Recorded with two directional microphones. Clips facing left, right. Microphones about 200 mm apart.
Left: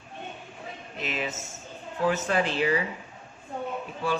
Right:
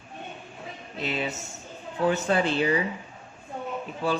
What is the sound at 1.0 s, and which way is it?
Speech, 35° right (ahead or behind).